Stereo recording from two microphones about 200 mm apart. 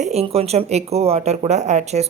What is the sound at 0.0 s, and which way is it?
Speech, 30° right (ahead or behind).